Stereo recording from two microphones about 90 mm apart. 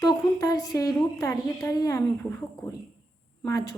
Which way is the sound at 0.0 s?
40° left (ahead or behind).